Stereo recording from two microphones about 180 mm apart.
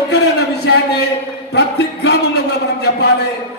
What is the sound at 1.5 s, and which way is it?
Music, 70° left (ahead or behind).